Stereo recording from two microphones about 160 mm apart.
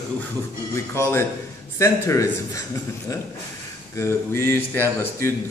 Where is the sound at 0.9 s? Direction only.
15° left (ahead or behind).